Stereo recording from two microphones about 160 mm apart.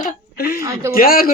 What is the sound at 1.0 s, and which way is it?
Speech, 65° left (ahead or behind).